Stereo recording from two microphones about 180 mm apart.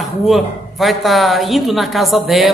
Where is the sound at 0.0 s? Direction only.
Centre (ahead or behind).